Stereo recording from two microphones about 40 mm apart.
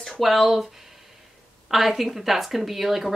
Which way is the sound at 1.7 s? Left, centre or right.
Centre.